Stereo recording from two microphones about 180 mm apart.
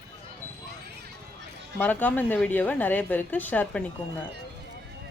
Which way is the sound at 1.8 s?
10° left (ahead or behind).